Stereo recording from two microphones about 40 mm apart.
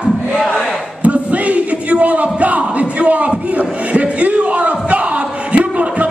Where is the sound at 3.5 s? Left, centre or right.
Right.